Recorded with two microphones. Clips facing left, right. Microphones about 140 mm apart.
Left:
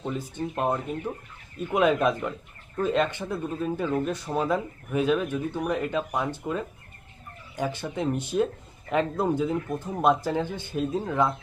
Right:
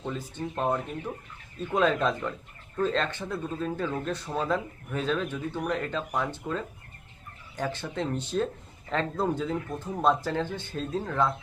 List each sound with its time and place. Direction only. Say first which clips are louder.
0.0 s speech: left 3 dB; 15° left (ahead or behind)